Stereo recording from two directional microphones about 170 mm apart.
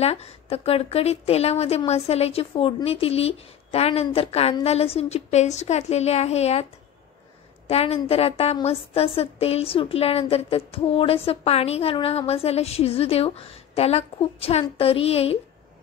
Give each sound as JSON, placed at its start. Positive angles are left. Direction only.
{"t": 0.0, "sound": "a woman's voice", "side_deg": 35}